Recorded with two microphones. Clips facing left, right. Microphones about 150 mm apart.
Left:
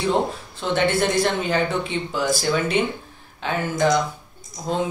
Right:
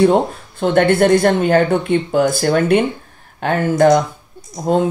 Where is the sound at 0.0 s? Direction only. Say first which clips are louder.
Right 9 dB; 55° right (ahead or behind).